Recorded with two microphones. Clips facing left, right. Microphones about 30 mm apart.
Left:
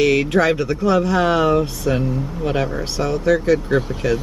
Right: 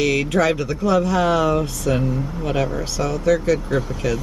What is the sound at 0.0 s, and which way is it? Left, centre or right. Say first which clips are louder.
Speech: left 3 dB; centre.